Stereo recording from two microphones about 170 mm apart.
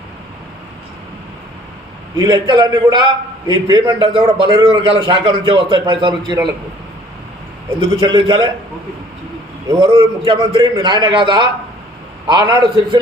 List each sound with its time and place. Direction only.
2.1 s a man's voice: 25° right (ahead or behind)
7.8 s a man's voice: 25° right (ahead or behind)
9.8 s a man's voice: 30° right (ahead or behind)